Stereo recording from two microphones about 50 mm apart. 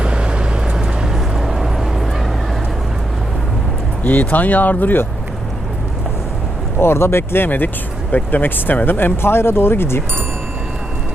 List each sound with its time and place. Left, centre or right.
0.0 s vehicle: right
1.1 s a sound: centre
4.0 s speech: left
6.7 s speech: left